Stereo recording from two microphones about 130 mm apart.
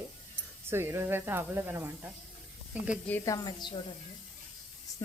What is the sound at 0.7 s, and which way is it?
Speech, 20° right (ahead or behind).